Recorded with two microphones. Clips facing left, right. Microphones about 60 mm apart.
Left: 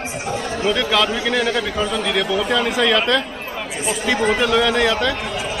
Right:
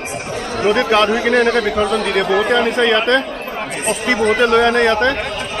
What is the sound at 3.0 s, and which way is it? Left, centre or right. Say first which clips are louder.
Chatter: right 4 dB; right.